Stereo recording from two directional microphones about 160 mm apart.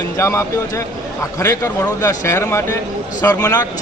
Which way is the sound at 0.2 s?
20° left (ahead or behind).